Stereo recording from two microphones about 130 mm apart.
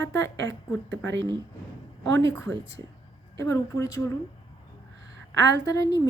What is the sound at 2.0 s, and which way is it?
A woman's voice, 20° left (ahead or behind).